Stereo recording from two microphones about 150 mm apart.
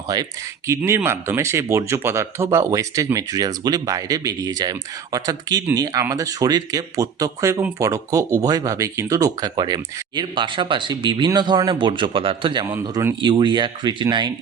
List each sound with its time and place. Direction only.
0.1 s speech: 25° right (ahead or behind)
0.7 s speech: 15° right (ahead or behind)